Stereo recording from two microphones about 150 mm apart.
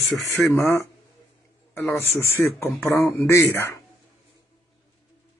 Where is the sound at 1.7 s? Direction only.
15° left (ahead or behind).